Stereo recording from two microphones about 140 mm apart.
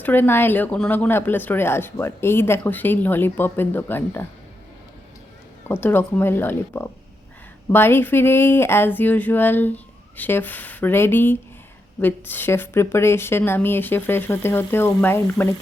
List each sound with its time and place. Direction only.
0.0 s speech: 15° left (ahead or behind)
5.6 s speech: 15° left (ahead or behind)